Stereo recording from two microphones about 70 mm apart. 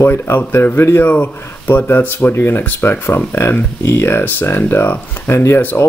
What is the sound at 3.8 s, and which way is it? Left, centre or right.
Speech, left.